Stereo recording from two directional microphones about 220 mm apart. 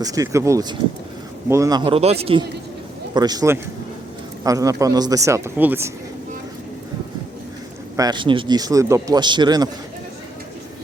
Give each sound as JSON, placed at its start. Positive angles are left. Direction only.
{"t": 0.0, "sound": "a man's voice", "side_deg": -15}
{"t": 7.9, "sound": "a man's voice", "side_deg": -20}